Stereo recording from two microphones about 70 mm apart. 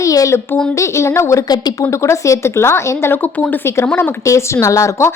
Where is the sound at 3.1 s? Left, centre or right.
Left.